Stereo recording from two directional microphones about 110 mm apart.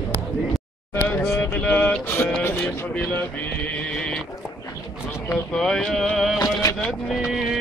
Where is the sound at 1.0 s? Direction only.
20° left (ahead or behind).